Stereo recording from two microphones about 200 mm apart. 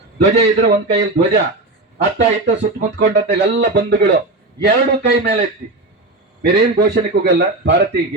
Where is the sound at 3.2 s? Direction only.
60° right (ahead or behind).